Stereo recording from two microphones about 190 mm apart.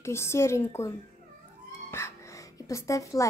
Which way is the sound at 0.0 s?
15° left (ahead or behind).